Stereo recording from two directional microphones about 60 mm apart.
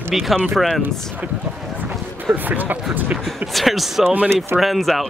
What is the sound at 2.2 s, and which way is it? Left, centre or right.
Speech, right.